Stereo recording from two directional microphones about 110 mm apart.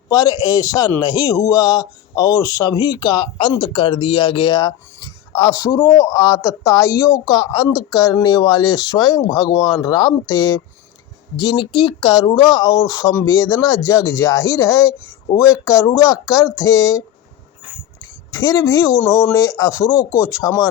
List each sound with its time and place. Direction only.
0.1 s a man's voice: 35° left (ahead or behind)
11.3 s a man's voice: 45° left (ahead or behind); by 17.0 s 30° left (ahead or behind)
18.3 s speech: 35° left (ahead or behind)
19.3 s a man's voice: 30° left (ahead or behind)